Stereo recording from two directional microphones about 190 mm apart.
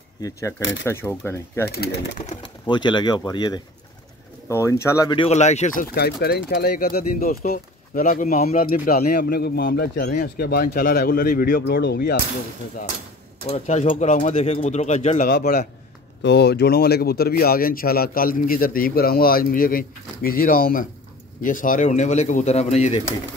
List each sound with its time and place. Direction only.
0.2 s speech: 15° left (ahead or behind)
0.6 s speech: 75° left (ahead or behind)
0.8 s speech: 15° left (ahead or behind)
1.7 s speech: 60° left (ahead or behind)
2.4 s speech: 25° left (ahead or behind)
5.9 s speech: 55° left (ahead or behind)
13.5 s speech: 35° left (ahead or behind)
16.2 s speech: 60° left (ahead or behind); by 23.1 s 35° left (ahead or behind)